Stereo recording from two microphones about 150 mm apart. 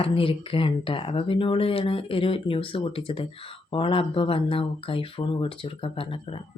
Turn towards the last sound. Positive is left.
turn(degrees=35)  # may be behind; listen again after turning